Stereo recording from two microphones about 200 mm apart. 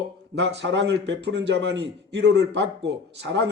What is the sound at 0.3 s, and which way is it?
A man's voice, 60° right (ahead or behind).